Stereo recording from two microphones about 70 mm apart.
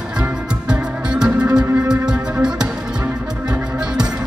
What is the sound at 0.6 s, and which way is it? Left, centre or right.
Music, centre.